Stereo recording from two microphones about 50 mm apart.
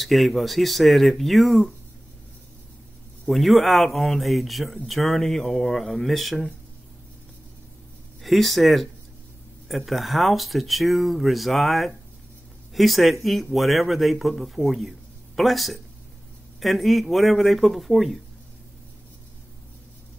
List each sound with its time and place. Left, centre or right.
0.0 s speech: centre
3.3 s speech: centre
8.2 s speech: centre